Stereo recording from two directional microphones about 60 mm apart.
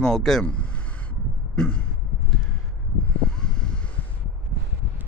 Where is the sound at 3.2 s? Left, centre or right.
Centre.